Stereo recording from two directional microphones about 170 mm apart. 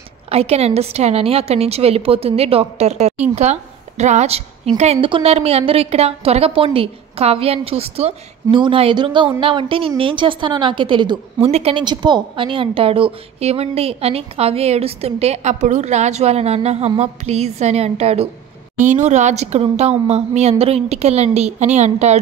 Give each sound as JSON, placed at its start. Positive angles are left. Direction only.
{"t": 0.3, "sound": "a woman's voice", "side_deg": -35}